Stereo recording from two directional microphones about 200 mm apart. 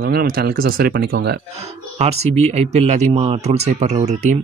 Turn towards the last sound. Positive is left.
turn(degrees=-35)  # may be behind; listen again after turning